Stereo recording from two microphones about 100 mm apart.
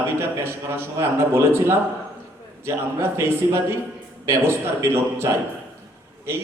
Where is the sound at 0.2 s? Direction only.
25° right (ahead or behind).